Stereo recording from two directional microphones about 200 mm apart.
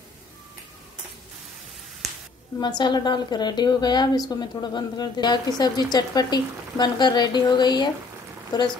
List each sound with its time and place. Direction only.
2.8 s speech: 20° left (ahead or behind)